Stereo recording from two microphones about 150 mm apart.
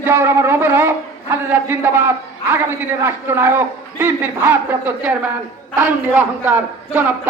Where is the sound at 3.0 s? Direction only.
15° right (ahead or behind).